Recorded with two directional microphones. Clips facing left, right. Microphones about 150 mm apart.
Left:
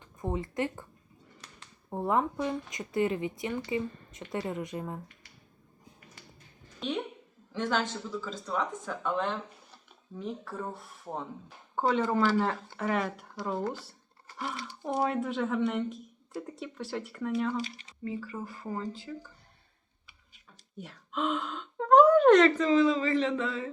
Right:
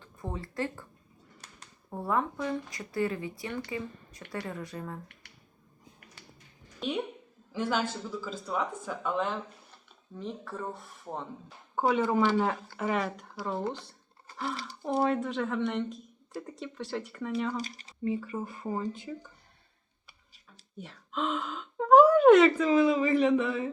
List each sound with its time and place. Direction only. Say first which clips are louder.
0.0 s speech: left 5 dB; 20° left (ahead or behind)
1.9 s speech: left 2 dB; 20° left (ahead or behind)
6.7 s a woman's voice: right 1 dB; 10° right (ahead or behind)
11.8 s speech: right 1 dB; 10° right (ahead or behind)
17.6 s speech: left 2 dB; 40° right (ahead or behind)
18.0 s speech: right 4 dB; 20° right (ahead or behind)
20.7 s speech: even; centre (ahead or behind); by 23.7 s 15° right (ahead or behind)